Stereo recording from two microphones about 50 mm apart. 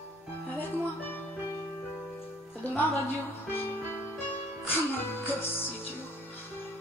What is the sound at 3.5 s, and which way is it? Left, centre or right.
Music, left.